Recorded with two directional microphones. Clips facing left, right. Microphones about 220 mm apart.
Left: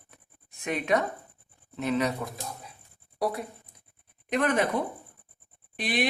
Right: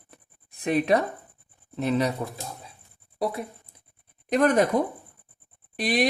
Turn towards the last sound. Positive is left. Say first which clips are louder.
# right 4 dB
turn(degrees=-40)  # may be behind; listen again after turning